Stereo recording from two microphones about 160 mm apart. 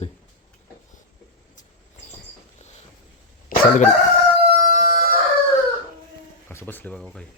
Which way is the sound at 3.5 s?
50° left (ahead or behind).